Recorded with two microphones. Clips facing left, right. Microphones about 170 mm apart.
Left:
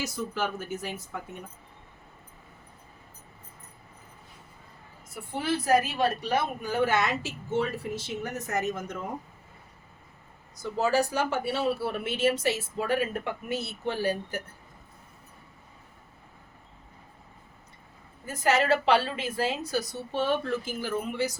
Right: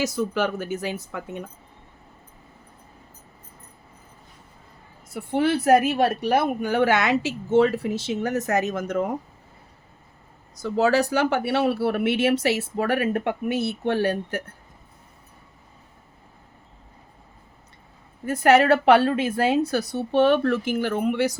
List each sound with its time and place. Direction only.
0.0 s a woman's voice: 80° right
5.0 s a woman's voice: 70° right (ahead or behind)
10.6 s speech: 80° right
18.3 s a woman's voice: 65° right (ahead or behind)